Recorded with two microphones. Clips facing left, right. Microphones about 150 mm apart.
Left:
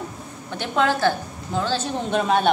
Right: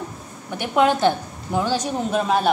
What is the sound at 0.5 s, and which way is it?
A woman's voice, 15° right (ahead or behind).